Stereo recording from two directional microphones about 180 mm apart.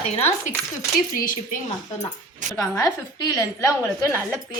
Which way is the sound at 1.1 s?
50° left (ahead or behind).